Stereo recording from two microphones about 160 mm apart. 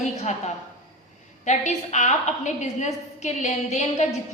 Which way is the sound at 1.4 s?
45° left (ahead or behind).